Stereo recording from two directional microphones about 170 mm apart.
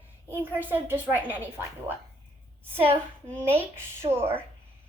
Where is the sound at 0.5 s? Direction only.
10° right (ahead or behind).